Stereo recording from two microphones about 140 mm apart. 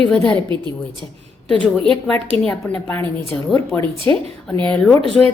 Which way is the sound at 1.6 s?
5° left (ahead or behind).